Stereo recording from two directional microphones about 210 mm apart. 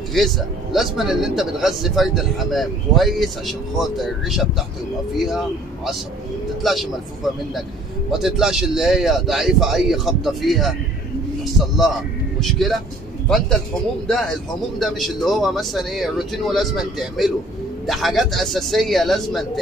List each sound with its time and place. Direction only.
0.2 s speech: centre (ahead or behind)
6.6 s speech: centre (ahead or behind)
8.1 s speech: centre (ahead or behind)
11.7 s speech: centre (ahead or behind)
14.0 s speech: centre (ahead or behind)